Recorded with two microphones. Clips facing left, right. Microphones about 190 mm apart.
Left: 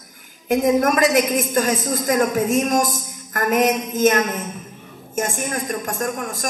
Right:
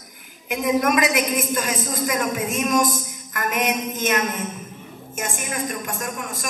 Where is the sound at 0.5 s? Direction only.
40° left (ahead or behind).